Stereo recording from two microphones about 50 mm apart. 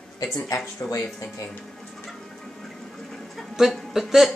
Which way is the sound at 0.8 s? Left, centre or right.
Left.